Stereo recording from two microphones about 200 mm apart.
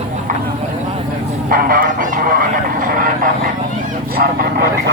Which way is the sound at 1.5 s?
45° right (ahead or behind).